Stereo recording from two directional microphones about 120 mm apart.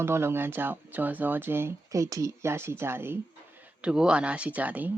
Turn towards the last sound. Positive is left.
turn(degrees=-15)  # may be behind; listen again after turning